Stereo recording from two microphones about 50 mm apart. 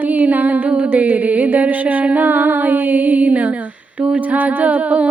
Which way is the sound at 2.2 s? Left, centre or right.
Right.